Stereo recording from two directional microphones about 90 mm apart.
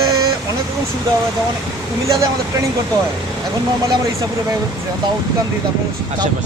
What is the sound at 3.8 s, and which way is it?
Speech, 40° right (ahead or behind).